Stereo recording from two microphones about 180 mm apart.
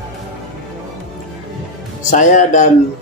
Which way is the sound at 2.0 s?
45° left (ahead or behind).